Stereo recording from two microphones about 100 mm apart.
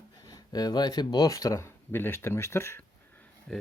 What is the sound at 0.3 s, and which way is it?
Speech, 40° left (ahead or behind).